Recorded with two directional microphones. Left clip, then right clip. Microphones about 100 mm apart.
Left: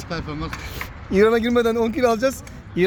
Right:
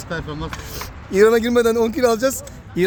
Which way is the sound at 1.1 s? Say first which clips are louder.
Right 3 dB; 40° right (ahead or behind).